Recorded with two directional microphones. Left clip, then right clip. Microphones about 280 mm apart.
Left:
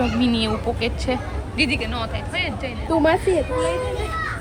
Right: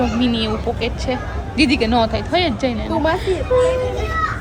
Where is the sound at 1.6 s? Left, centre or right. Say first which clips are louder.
Right 8 dB; centre.